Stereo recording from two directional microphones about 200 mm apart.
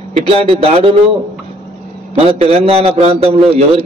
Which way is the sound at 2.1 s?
30° right (ahead or behind).